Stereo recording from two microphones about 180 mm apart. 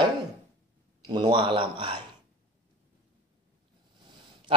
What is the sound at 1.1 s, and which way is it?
Speech, 25° right (ahead or behind).